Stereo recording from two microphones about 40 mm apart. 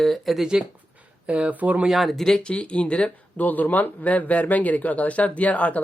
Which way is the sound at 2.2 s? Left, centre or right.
Left.